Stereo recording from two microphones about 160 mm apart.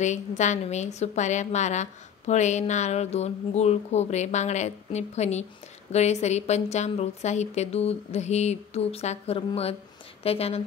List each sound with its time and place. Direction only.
0.0 s a woman's voice: 50° left (ahead or behind)